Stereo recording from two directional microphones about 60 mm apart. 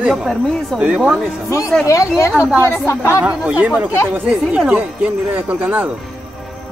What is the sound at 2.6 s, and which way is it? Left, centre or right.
Speech, left.